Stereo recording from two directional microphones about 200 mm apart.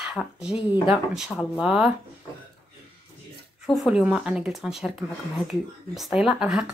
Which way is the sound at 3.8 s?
5° right (ahead or behind).